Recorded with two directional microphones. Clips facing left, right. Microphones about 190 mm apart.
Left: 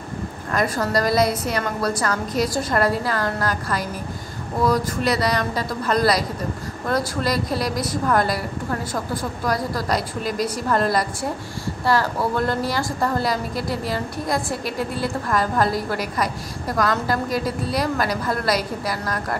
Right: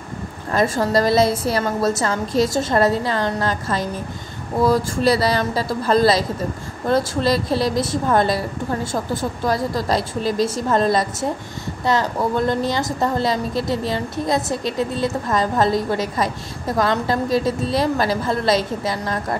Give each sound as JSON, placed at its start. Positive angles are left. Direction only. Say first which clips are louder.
{"t": 0.5, "sound": "a woman's voice", "louder": "right 4 dB", "side_deg": -25}